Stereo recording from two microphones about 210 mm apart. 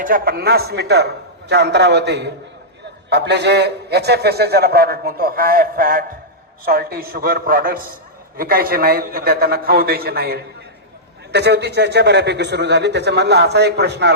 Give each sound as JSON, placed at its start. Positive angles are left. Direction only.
{"t": 0.0, "sound": "a man's voice", "side_deg": -45}